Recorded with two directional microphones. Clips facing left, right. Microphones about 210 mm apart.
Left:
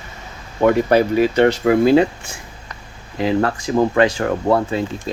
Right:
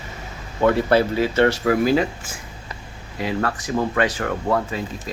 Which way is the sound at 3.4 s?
30° left (ahead or behind).